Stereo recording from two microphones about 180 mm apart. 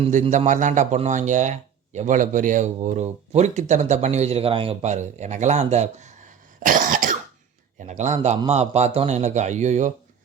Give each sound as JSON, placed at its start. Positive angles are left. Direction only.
{"t": 0.0, "sound": "speech", "side_deg": -45}